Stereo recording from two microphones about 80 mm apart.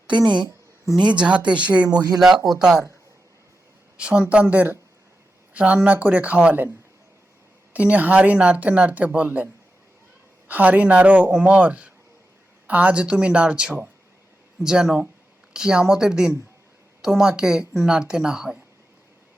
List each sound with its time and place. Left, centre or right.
1.0 s a woman's voice: centre
2.1 s a woman's voice: centre
3.9 s a woman's voice: centre
10.5 s a woman's voice: centre